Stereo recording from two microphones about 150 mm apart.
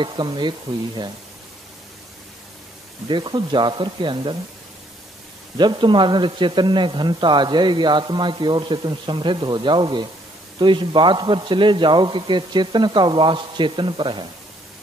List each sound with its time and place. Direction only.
0.0 s speech: 30° right (ahead or behind)
3.1 s speech: 30° right (ahead or behind)
5.6 s speech: 30° right (ahead or behind)